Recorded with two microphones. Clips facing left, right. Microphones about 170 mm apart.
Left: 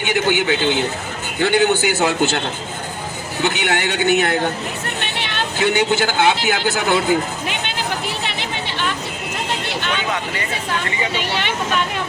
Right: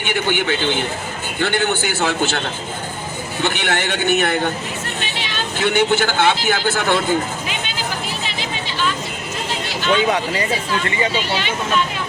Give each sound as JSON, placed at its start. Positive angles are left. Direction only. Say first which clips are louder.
{"t": 0.1, "sound": "a man's voice", "louder": "left 2 dB", "side_deg": 15}
{"t": 3.4, "sound": "a man's voice", "louder": "left 1 dB", "side_deg": 15}
{"t": 5.1, "sound": "vehicle", "louder": "left 1 dB", "side_deg": 60}
{"t": 5.5, "sound": "a man's voice", "louder": "right 1 dB", "side_deg": 15}
{"t": 9.9, "sound": "speech", "louder": "right 9 dB", "side_deg": -30}